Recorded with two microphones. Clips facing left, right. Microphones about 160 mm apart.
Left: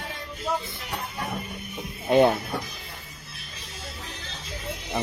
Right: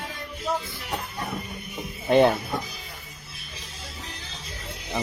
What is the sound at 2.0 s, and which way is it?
Speech, centre (ahead or behind).